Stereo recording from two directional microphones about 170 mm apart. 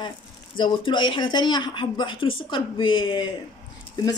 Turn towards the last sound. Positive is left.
turn(degrees=25)  # may be behind; listen again after turning